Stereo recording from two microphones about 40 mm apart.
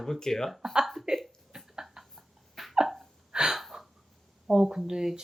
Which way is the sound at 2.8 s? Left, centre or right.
Centre.